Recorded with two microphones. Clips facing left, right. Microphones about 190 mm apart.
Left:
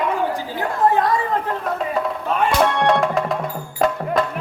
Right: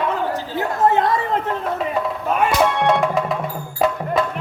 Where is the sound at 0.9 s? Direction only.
25° right (ahead or behind).